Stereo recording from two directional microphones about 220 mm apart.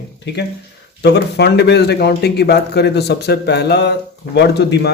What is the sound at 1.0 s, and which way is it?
A man's voice, 50° left (ahead or behind).